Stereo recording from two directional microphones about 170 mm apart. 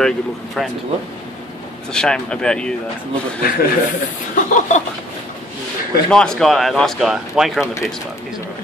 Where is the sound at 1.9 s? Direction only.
5° left (ahead or behind).